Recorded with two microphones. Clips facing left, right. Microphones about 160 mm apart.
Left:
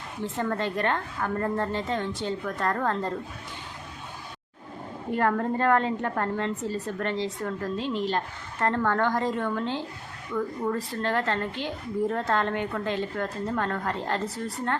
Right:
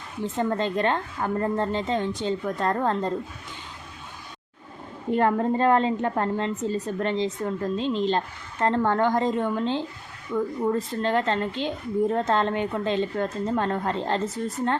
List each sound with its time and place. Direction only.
0.3 s a woman's voice: 20° right (ahead or behind)
5.1 s a woman's voice: 20° right (ahead or behind)